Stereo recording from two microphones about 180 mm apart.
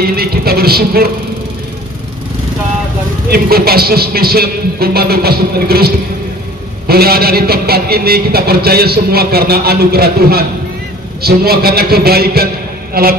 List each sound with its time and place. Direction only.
0.0 s a man's voice: 60° right (ahead or behind)
3.3 s a man's voice: 60° right (ahead or behind)